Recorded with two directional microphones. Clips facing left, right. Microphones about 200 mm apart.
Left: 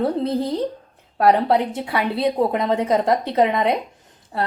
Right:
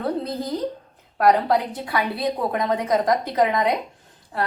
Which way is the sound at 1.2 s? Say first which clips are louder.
Left 2 dB; 25° left (ahead or behind).